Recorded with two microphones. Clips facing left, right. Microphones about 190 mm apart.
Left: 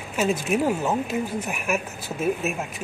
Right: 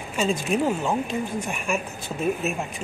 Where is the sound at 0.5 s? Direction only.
5° left (ahead or behind).